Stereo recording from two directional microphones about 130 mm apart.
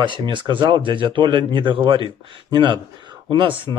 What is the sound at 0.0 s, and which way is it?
Speech, 40° right (ahead or behind).